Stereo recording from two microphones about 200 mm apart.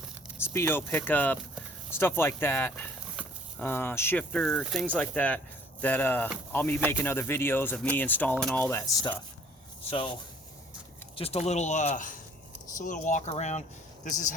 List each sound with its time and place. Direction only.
0.3 s speech: 10° left (ahead or behind)
9.9 s speech: 25° left (ahead or behind)